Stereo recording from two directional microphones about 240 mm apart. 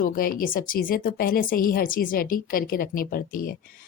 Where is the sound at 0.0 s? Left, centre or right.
Left.